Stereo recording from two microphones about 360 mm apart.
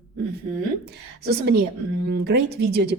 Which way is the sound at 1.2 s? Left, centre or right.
Right.